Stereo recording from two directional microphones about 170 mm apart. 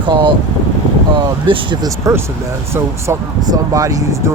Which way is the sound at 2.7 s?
20° right (ahead or behind).